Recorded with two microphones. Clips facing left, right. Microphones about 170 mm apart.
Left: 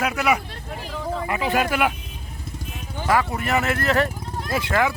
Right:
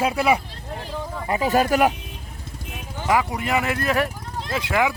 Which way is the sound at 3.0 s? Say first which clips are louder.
Even; 15° right (ahead or behind).